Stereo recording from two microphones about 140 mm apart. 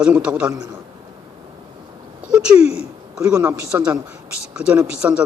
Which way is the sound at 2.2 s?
5° right (ahead or behind).